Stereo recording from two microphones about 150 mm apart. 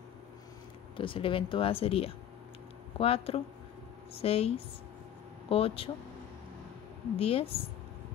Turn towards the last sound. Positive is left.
turn(degrees=40)  # may be behind; listen again after turning